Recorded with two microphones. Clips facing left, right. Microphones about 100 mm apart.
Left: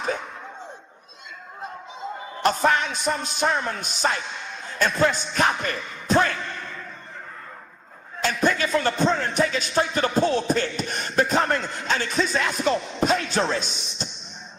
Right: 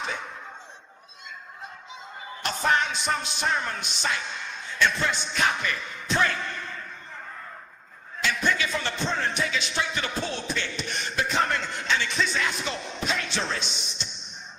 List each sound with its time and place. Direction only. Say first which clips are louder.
2.4 s a man's voice: left 4 dB; 40° left (ahead or behind)
8.2 s speech: left 4 dB; 40° left (ahead or behind)